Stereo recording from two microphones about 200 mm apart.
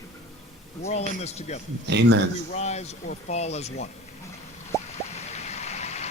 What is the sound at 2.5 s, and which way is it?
Speech, 35° left (ahead or behind).